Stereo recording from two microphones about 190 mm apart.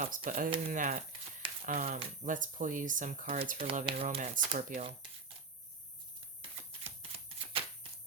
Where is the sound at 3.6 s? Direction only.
30° right (ahead or behind).